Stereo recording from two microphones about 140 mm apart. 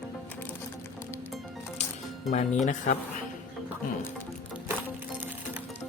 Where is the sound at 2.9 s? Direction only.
60° left (ahead or behind).